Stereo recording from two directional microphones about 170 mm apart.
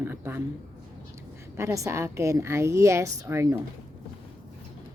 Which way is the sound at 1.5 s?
15° right (ahead or behind).